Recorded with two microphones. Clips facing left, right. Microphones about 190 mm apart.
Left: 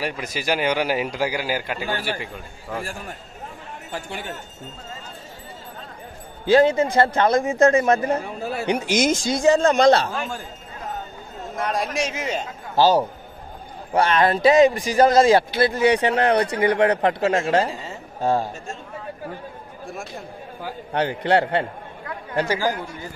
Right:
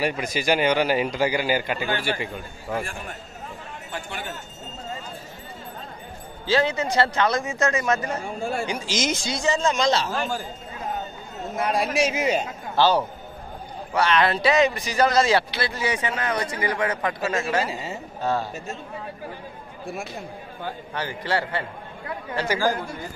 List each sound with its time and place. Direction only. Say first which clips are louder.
0.0 s a man's voice: right 2 dB; centre (ahead or behind)
6.4 s speech: left 7 dB; 50° left (ahead or behind)
8.4 s a man's voice: even; 5° left (ahead or behind)
8.6 s speech: left 6 dB; 60° left (ahead or behind)
10.1 s a man's voice: right 2 dB; centre (ahead or behind)
11.5 s a man's voice: right 1 dB; 10° right (ahead or behind)
12.7 s a man's voice: left 3 dB; 40° left (ahead or behind); by 17.6 s 60° left (ahead or behind)
17.6 s a woman's voice: even; 10° right (ahead or behind)
18.2 s speech: left 4 dB; 45° left (ahead or behind)
20.9 s speech: left 8 dB; 65° left (ahead or behind)